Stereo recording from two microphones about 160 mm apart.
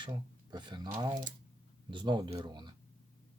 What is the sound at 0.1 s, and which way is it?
Speech, 30° right (ahead or behind).